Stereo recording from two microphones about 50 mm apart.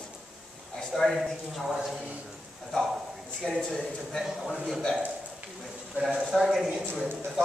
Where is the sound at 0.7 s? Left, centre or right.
Centre.